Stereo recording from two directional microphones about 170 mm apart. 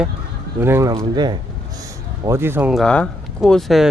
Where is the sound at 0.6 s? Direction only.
15° right (ahead or behind).